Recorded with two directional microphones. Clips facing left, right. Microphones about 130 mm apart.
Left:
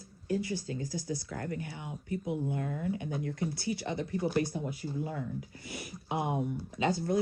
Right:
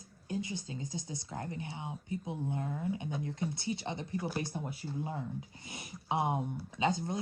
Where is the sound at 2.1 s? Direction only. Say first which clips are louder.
Left 4 dB; 80° left.